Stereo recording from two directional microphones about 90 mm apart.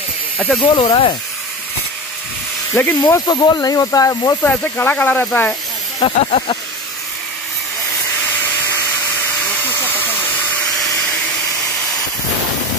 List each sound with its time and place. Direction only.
0.6 s speech: 65° left (ahead or behind)
2.7 s speech: 20° left (ahead or behind)
3.3 s speech: 50° left (ahead or behind)
4.4 s speech: 20° left (ahead or behind)
6.0 s speech: 75° left (ahead or behind)